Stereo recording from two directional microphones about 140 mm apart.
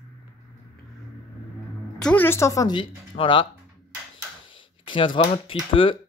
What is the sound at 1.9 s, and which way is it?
Music, 5° left (ahead or behind).